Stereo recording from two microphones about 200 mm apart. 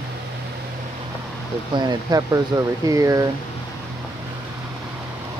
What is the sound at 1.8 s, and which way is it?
Speech, 20° right (ahead or behind).